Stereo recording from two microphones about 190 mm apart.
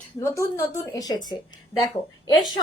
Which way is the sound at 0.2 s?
15° left (ahead or behind).